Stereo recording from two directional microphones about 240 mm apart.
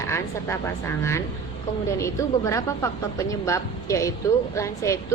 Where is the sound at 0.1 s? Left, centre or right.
Centre.